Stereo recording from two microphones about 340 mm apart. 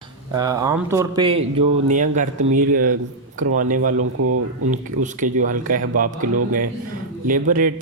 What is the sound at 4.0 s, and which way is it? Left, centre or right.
Speech, right.